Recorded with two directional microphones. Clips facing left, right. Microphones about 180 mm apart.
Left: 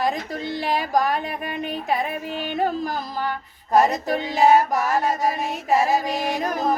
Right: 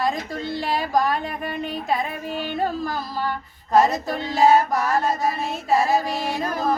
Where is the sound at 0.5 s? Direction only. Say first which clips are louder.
Even; 15° left (ahead or behind).